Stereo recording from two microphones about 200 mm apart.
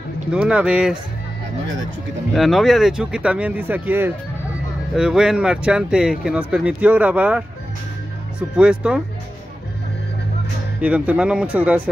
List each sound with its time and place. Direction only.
0.3 s speech: 5° right (ahead or behind)
2.3 s speech: centre (ahead or behind)
10.8 s speech: 5° right (ahead or behind)